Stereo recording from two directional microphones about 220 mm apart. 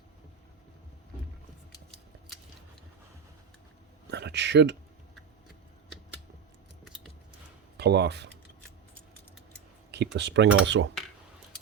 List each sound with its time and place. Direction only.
4.1 s speech: 50° right (ahead or behind)
7.8 s speech: 50° right (ahead or behind)
9.9 s speech: 50° right (ahead or behind)